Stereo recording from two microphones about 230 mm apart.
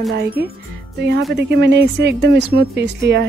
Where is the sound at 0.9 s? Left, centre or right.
Right.